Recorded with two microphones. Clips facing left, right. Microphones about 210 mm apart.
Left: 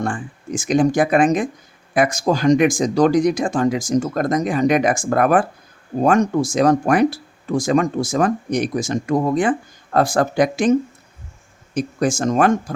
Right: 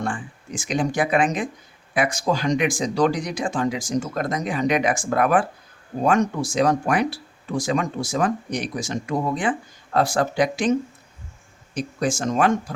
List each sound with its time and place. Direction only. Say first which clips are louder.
0.0 s speech: left 4 dB; 45° left (ahead or behind)